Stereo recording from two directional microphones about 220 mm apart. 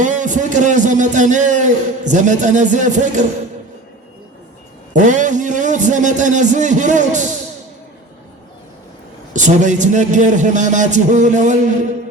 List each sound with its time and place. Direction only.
0.0 s a man's voice: 35° right (ahead or behind)
4.9 s a man's voice: 35° right (ahead or behind)
9.3 s a man's voice: 35° right (ahead or behind)